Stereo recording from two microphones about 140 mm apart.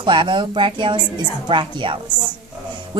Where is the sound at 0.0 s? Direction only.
35° right (ahead or behind).